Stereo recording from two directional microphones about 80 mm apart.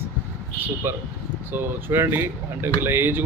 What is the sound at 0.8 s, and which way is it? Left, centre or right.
Speech, right.